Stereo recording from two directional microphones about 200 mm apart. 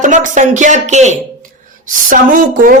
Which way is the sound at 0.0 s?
40° right (ahead or behind).